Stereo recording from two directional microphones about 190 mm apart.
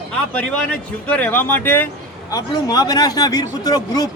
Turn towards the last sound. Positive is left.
turn(degrees=20)  # may be behind; listen again after turning